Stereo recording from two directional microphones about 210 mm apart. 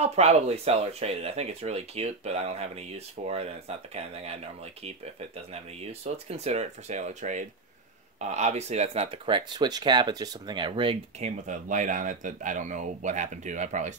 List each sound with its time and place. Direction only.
0.0 s speech: 30° right (ahead or behind)
5.5 s speech: 30° right (ahead or behind)